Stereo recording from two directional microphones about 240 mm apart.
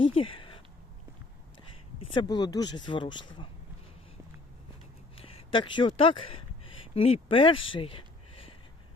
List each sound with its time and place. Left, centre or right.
0.0 s a sound: left
2.0 s speech: centre
5.2 s speech: left